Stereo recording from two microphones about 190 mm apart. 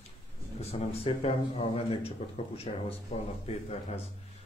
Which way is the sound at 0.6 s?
30° left (ahead or behind).